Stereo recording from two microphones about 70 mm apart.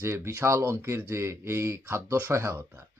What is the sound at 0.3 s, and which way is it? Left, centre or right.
Speech, right.